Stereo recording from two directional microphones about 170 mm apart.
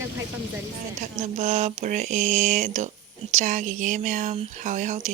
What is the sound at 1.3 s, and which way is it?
Speech, 40° right (ahead or behind).